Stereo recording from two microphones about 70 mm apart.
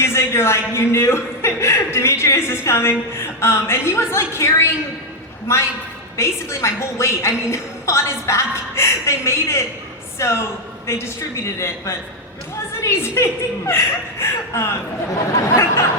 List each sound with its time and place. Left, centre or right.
0.0 s speech: left
6.1 s a woman's voice: left